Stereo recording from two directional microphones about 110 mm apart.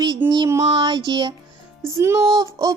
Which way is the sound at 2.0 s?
25° right (ahead or behind).